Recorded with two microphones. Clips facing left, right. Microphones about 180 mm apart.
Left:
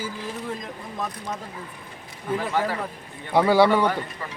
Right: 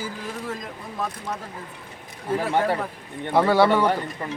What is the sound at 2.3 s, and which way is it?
Speech, 30° right (ahead or behind).